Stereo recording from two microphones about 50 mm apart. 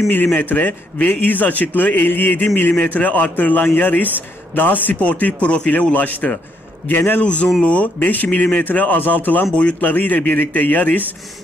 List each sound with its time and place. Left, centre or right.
0.4 s a man's voice: left
7.2 s a man's voice: left